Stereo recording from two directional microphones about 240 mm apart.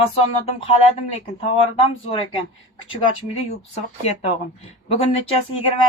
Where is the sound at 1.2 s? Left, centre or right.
Left.